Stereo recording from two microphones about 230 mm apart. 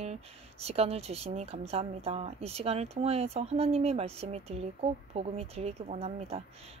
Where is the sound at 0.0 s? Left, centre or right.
Right.